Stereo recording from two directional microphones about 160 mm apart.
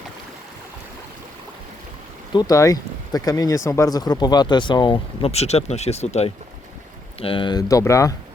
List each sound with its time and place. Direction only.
2.3 s speech: 25° left (ahead or behind)